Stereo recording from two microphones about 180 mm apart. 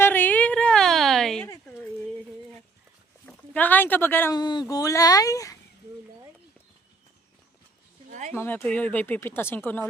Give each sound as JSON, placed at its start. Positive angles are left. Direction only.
{"t": 0.0, "sound": "a sound", "side_deg": 10}
{"t": 3.2, "sound": "speech", "side_deg": 10}
{"t": 8.3, "sound": "speech", "side_deg": 15}